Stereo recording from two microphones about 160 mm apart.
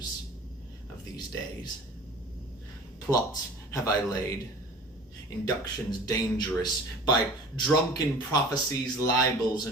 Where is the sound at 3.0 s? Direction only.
20° left (ahead or behind).